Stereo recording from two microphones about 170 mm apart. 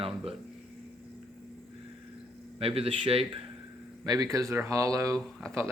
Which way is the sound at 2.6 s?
35° right (ahead or behind).